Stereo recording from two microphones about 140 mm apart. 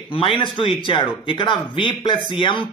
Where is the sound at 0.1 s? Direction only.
40° left (ahead or behind).